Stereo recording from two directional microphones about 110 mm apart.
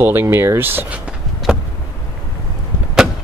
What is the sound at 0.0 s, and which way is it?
Speech, 20° right (ahead or behind).